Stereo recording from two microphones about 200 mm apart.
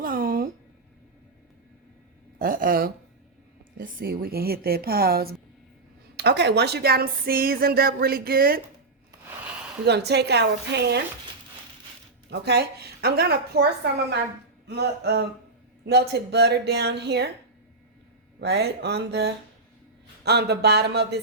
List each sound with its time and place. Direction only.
0.0 s a sound: 45° right (ahead or behind)
2.4 s a woman's voice: 45° right (ahead or behind)
9.8 s a woman's voice: 55° right (ahead or behind)
12.3 s a woman's voice: 55° right (ahead or behind)
18.3 s a woman's voice: 55° right (ahead or behind)